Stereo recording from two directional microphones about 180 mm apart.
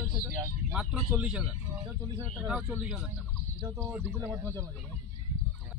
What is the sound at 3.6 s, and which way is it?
Speech, 15° right (ahead or behind).